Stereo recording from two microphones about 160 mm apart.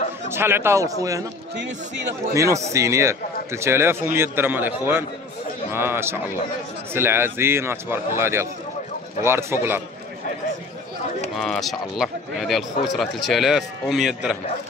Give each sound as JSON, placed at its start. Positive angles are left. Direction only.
{"t": 0.3, "sound": "a man's voice", "side_deg": -15}
{"t": 2.3, "sound": "a man's voice", "side_deg": -20}
{"t": 11.3, "sound": "speech", "side_deg": 5}